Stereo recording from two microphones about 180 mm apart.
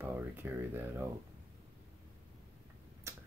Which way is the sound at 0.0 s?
10° right (ahead or behind).